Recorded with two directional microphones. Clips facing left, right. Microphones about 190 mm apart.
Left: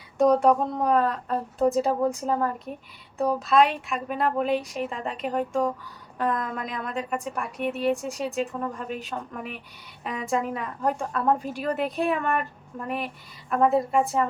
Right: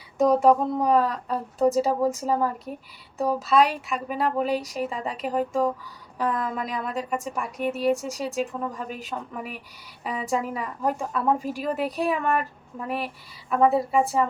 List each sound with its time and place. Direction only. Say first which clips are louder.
0.2 s a woman's voice: right 1 dB; centre (ahead or behind)